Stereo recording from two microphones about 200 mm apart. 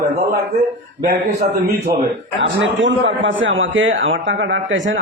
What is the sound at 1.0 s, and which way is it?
Speech, 45° right (ahead or behind).